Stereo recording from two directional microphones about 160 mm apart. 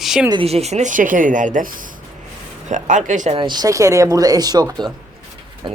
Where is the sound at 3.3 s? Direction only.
30° right (ahead or behind).